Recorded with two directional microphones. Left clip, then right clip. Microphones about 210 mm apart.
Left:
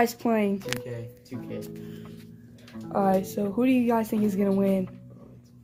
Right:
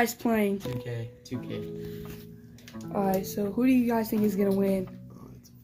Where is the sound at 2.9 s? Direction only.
15° left (ahead or behind).